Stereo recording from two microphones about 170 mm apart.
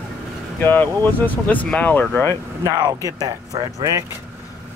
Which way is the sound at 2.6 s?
20° right (ahead or behind).